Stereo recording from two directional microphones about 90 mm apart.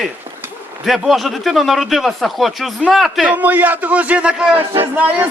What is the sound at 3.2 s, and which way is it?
A man's voice, 20° right (ahead or behind).